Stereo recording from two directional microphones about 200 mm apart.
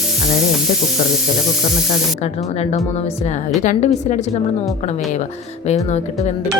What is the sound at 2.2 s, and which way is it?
A woman's voice, 35° left (ahead or behind).